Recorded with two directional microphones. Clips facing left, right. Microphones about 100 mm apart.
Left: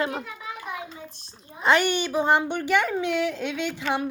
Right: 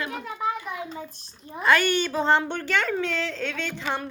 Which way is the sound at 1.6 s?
20° left (ahead or behind).